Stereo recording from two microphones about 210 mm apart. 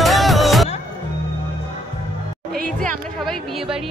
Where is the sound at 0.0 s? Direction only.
Centre (ahead or behind).